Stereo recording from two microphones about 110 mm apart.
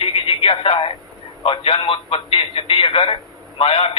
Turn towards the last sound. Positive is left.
turn(degrees=65)  # may be behind; listen again after turning